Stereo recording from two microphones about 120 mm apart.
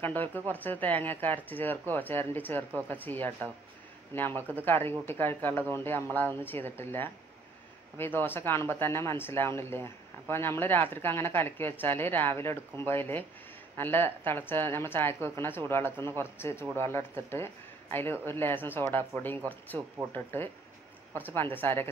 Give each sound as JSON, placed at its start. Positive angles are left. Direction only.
{"t": 0.0, "sound": "speech", "side_deg": 15}